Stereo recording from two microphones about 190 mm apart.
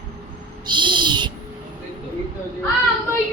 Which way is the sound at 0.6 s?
25° right (ahead or behind).